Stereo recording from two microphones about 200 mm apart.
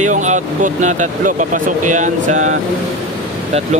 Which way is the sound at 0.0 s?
35° right (ahead or behind).